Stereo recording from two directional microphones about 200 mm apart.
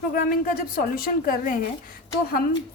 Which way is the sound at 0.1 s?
45° left (ahead or behind).